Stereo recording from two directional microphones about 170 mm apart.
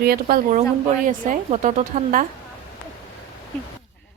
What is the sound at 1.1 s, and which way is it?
A woman's voice, 50° right (ahead or behind).